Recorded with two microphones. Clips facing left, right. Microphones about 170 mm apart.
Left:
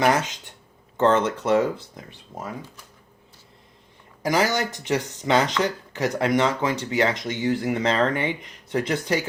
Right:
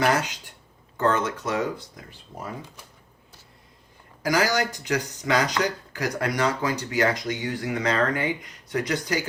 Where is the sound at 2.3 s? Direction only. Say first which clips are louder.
Left 2 dB; 20° left (ahead or behind).